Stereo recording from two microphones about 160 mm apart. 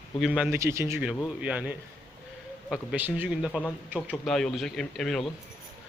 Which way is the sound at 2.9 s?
10° right (ahead or behind).